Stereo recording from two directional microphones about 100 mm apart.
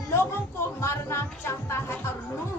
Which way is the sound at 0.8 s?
25° left (ahead or behind).